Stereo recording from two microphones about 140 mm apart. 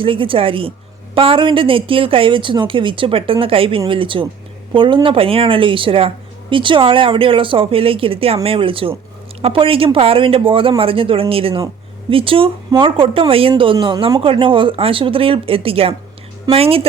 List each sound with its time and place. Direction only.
0.0 s a woman's voice: 40° right (ahead or behind)